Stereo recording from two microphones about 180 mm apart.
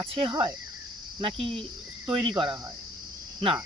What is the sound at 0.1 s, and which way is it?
Speech, 30° right (ahead or behind).